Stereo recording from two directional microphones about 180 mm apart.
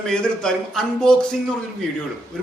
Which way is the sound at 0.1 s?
5° left (ahead or behind).